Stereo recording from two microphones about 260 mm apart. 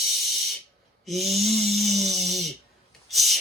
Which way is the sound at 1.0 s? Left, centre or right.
Centre.